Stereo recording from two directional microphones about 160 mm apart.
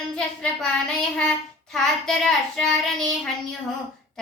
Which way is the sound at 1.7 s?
5° left (ahead or behind).